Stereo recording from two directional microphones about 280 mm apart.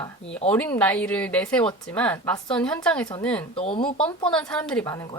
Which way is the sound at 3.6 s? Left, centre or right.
Centre.